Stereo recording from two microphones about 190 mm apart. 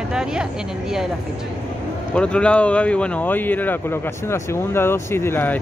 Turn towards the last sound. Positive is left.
turn(degrees=10)  # may be behind; listen again after turning